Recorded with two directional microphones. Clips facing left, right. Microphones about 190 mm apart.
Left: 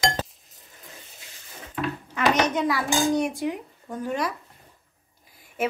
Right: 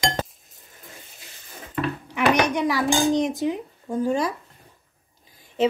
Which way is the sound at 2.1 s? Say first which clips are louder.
Right 2 dB; 10° right (ahead or behind).